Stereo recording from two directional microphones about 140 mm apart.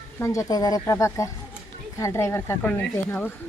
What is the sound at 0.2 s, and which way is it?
A woman's voice, 25° left (ahead or behind).